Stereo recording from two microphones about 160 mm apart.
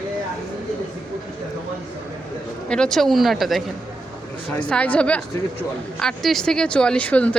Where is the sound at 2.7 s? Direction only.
5° left (ahead or behind).